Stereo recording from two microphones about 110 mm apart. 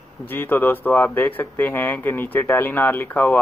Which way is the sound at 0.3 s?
20° left (ahead or behind).